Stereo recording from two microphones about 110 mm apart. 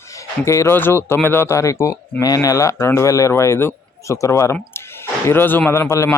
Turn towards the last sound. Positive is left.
turn(degrees=25)  # may be behind; listen again after turning